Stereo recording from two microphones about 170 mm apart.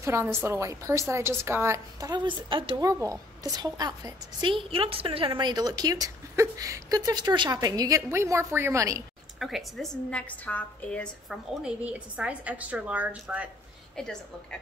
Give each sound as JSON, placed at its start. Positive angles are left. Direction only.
{"t": 0.0, "sound": "a woman's voice", "side_deg": -15}
{"t": 9.4, "sound": "a woman's voice", "side_deg": 0}
{"t": 11.6, "sound": "a woman's voice", "side_deg": -5}
{"t": 14.0, "sound": "a woman's voice", "side_deg": 0}